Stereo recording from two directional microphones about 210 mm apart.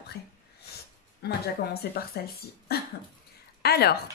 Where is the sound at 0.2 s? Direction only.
50° left (ahead or behind).